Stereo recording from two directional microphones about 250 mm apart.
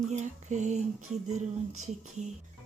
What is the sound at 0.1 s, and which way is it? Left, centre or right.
Speech, right.